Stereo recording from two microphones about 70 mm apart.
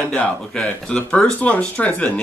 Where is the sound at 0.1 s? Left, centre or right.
Centre.